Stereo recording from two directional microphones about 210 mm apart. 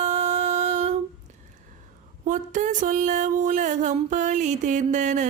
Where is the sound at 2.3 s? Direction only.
35° right (ahead or behind).